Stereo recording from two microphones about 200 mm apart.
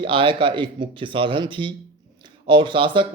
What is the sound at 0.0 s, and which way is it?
Speech, 25° right (ahead or behind).